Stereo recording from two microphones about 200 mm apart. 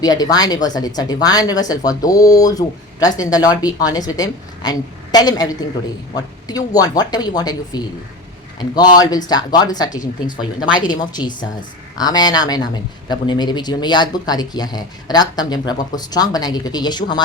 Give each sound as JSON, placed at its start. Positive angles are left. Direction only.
{"t": 0.0, "sound": "speech", "side_deg": 20}
{"t": 10.0, "sound": "speech", "side_deg": 40}
{"t": 10.6, "sound": "speech", "side_deg": 20}